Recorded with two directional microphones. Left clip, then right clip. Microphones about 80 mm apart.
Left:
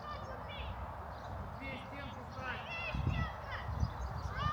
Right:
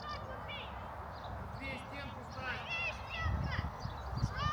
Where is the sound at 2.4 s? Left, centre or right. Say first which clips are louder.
Right 3 dB; right.